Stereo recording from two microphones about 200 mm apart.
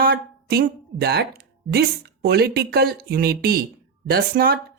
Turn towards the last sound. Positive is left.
turn(degrees=-50)  # may be behind; listen again after turning